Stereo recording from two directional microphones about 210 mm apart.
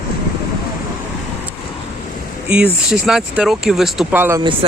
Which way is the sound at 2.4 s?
5° right (ahead or behind).